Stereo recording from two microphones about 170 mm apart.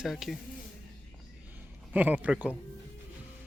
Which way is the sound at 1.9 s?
10° right (ahead or behind).